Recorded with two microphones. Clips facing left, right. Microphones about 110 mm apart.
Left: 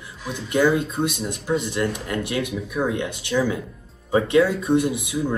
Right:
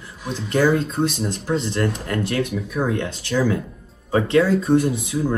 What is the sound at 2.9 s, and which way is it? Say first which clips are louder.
Speech: right 1 dB; 15° left (ahead or behind).